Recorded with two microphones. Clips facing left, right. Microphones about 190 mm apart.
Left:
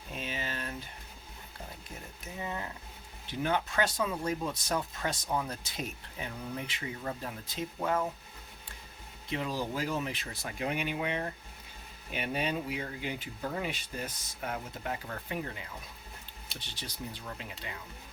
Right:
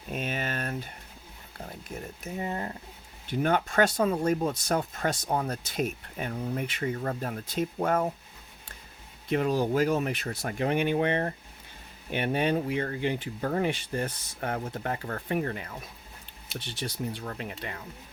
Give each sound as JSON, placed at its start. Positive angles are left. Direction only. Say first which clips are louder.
{"t": 0.1, "sound": "a sound", "louder": "right 6 dB", "side_deg": -60}
{"t": 2.4, "sound": "speech", "louder": "right 4 dB", "side_deg": -50}
{"t": 9.3, "sound": "speech", "louder": "right 9 dB", "side_deg": -55}
{"t": 17.2, "sound": "speech", "louder": "right 7 dB", "side_deg": -60}